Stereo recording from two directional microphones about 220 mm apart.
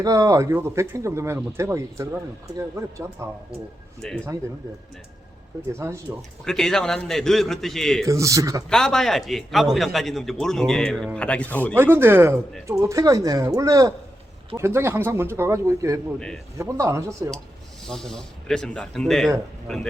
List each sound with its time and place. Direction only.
0.0 s speech: 15° right (ahead or behind)
5.7 s speech: 10° right (ahead or behind)
6.4 s a man's voice: centre (ahead or behind)
8.0 s speech: 15° right (ahead or behind)
8.7 s a man's voice: 5° left (ahead or behind)
11.7 s speech: 10° right (ahead or behind)
17.8 s a man's voice: centre (ahead or behind)